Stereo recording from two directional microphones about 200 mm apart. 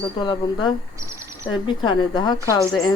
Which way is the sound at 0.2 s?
20° left (ahead or behind).